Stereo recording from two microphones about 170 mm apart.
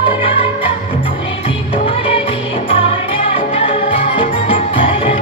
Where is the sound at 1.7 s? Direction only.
30° left (ahead or behind).